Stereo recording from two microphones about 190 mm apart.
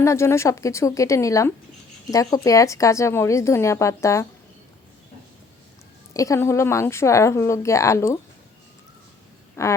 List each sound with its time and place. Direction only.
0.0 s a woman's voice: 15° left (ahead or behind)
6.1 s a woman's voice: 15° left (ahead or behind)
9.6 s a sound: 15° left (ahead or behind)